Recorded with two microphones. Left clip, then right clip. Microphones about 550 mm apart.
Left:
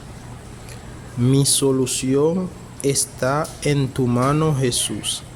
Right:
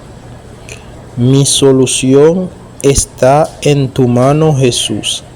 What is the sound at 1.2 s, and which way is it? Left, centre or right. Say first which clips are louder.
Speech: right 9 dB; left.